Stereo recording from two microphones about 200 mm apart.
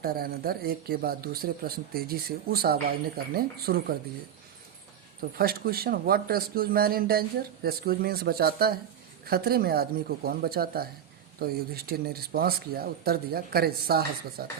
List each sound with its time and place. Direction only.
0.0 s speech: 50° right (ahead or behind)
5.4 s speech: 50° right (ahead or behind)